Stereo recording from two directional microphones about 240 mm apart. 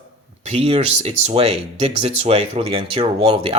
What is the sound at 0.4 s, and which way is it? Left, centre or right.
Speech, right.